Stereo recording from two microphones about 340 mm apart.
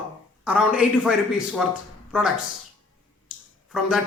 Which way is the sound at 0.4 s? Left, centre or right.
Centre.